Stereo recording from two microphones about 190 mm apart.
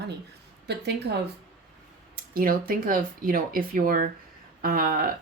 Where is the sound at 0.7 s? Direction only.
60° right (ahead or behind).